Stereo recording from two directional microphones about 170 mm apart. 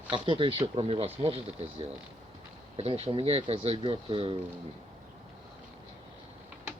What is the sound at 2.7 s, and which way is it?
Speech, 35° right (ahead or behind).